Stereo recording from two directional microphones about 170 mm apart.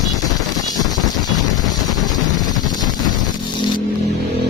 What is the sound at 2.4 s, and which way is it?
Vehicle, 25° left (ahead or behind).